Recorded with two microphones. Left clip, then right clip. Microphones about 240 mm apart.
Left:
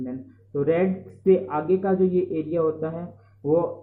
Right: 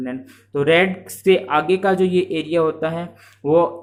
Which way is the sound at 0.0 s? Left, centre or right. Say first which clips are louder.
Right 5 dB; right.